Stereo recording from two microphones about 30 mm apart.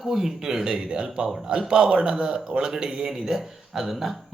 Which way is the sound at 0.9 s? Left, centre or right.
Right.